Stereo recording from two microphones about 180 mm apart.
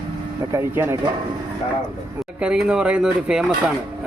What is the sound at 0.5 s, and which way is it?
Speech, 15° right (ahead or behind).